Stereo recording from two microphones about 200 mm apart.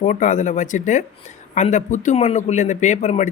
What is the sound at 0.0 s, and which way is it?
Speech, 40° left (ahead or behind).